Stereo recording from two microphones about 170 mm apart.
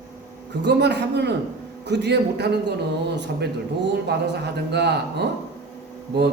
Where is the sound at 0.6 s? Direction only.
80° right.